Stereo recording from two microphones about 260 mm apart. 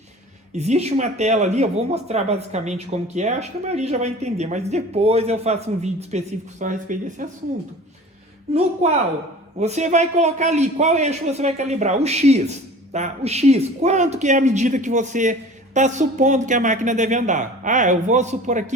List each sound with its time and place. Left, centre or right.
0.5 s a man's voice: right
8.5 s a man's voice: right